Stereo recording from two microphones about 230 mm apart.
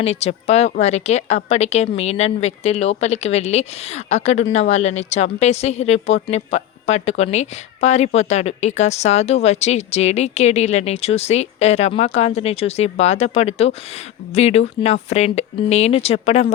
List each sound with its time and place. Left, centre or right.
0.0 s speech: left